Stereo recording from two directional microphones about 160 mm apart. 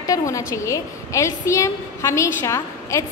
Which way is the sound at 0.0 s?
20° left (ahead or behind).